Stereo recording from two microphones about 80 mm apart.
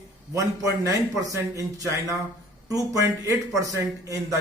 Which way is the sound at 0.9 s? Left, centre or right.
Right.